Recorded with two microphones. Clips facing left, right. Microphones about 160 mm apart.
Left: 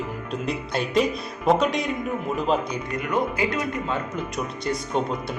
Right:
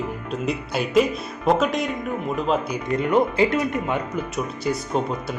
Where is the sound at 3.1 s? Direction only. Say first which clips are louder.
Right 5 dB; 25° right (ahead or behind).